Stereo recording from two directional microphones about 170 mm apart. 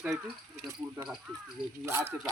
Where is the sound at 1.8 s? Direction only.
15° right (ahead or behind).